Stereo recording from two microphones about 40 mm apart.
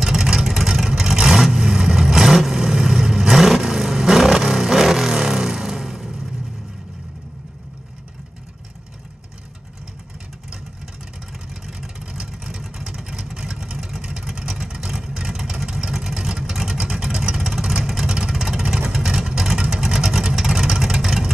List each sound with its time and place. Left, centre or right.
0.0 s vehicle: centre
12.0 s vehicle: centre
15.0 s vehicle: right